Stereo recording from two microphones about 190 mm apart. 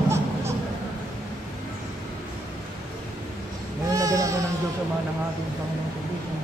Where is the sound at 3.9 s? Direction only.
15° right (ahead or behind).